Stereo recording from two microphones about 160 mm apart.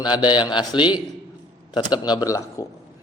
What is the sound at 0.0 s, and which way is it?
A man's voice, 30° left (ahead or behind).